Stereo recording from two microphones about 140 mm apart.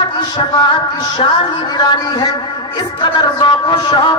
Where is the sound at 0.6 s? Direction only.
35° left (ahead or behind).